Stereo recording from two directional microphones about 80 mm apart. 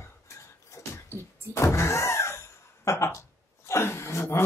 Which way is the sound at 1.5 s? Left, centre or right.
Left.